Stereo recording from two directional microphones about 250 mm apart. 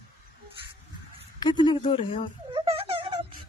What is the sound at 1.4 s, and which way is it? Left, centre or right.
Speech, centre.